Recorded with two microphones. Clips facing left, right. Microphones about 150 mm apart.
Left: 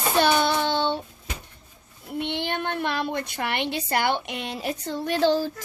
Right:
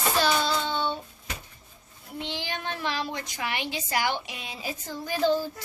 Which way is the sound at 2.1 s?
60° left (ahead or behind).